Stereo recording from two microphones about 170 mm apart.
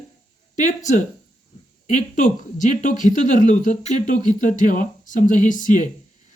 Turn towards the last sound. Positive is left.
turn(degrees=50)  # may be behind; listen again after turning